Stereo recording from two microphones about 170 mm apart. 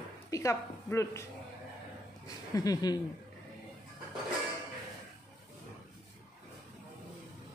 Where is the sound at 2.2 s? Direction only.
20° left (ahead or behind).